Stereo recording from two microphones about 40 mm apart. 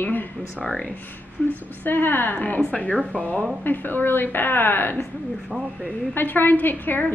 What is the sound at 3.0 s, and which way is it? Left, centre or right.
Speech, right.